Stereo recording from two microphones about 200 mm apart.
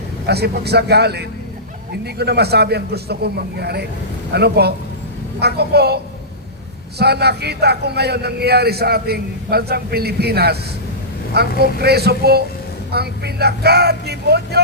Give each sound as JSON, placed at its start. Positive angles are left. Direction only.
{"t": 0.3, "sound": "a man's voice", "side_deg": -55}
{"t": 7.0, "sound": "a man's voice", "side_deg": -55}
{"t": 11.6, "sound": "a man's voice", "side_deg": -55}